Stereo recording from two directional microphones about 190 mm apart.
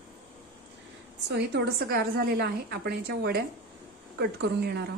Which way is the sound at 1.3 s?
60° right (ahead or behind).